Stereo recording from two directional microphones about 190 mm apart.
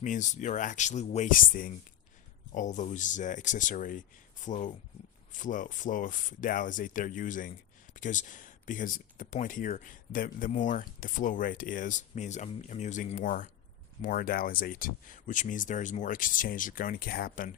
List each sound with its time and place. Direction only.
0.0 s speech: 40° left (ahead or behind)